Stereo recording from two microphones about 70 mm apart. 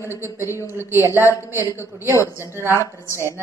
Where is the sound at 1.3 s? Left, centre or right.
Left.